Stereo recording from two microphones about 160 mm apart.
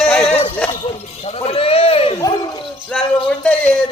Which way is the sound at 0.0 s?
5° left (ahead or behind).